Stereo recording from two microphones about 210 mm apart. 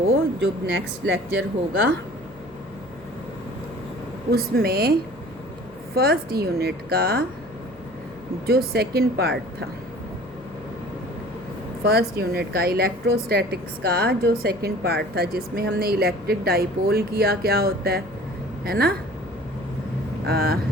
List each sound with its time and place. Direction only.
0.3 s speech: 60° right (ahead or behind)
4.3 s a woman's voice: 45° right (ahead or behind)
8.4 s a woman's voice: 50° right (ahead or behind)
11.9 s a woman's voice: 50° right (ahead or behind)
20.2 s a woman's voice: 50° right (ahead or behind)